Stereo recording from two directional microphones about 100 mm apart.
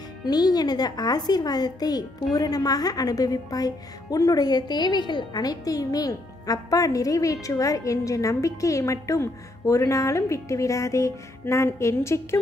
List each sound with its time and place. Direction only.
0.2 s speech: 40° left (ahead or behind); by 12.4 s 25° left (ahead or behind)